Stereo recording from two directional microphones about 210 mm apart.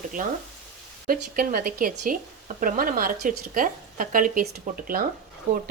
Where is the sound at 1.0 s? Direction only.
40° right (ahead or behind).